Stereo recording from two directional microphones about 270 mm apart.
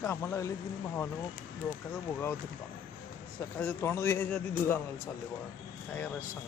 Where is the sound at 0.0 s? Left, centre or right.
Centre.